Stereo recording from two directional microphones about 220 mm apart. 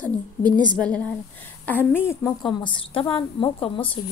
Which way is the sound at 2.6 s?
25° left (ahead or behind).